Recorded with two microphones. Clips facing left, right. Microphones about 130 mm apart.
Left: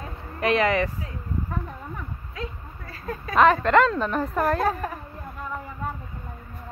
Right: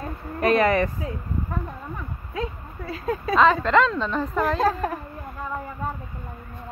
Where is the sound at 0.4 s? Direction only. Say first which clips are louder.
Right 2 dB; 45° right (ahead or behind).